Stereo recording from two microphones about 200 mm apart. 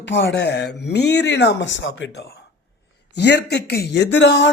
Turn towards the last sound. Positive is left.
turn(degrees=60)  # may be behind; listen again after turning